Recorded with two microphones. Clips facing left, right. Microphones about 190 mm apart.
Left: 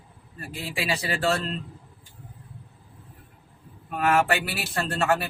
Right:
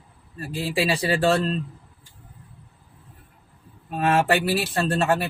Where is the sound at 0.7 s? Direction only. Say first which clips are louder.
Right 6 dB; 30° right (ahead or behind).